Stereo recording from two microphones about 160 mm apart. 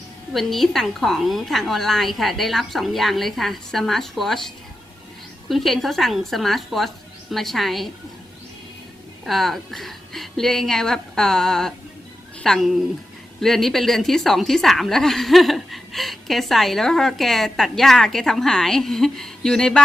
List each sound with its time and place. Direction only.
0.3 s a woman's voice: centre (ahead or behind)
9.2 s a woman's voice: centre (ahead or behind)